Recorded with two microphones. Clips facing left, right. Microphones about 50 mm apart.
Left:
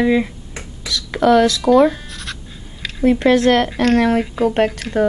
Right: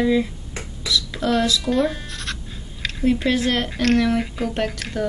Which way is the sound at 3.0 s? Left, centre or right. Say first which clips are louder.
Left 6 dB; left.